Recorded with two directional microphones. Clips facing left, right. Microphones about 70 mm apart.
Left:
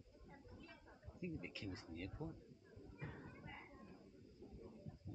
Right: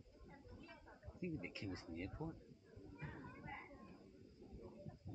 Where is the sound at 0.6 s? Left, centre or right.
Centre.